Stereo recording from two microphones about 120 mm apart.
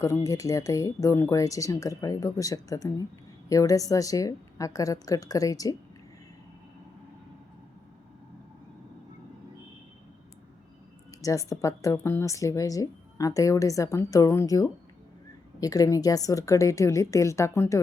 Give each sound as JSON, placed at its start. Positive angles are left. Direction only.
{"t": 0.0, "sound": "a woman's voice", "side_deg": 25}
{"t": 11.2, "sound": "a woman's voice", "side_deg": 30}